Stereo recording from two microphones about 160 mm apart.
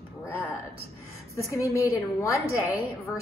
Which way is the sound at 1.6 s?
20° left (ahead or behind).